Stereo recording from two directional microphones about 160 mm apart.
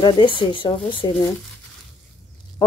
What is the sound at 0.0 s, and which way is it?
Speech, 30° left (ahead or behind).